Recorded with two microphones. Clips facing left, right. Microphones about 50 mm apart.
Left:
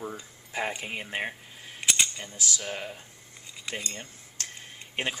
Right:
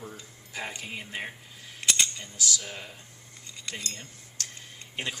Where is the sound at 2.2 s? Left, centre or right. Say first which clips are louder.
Even; left.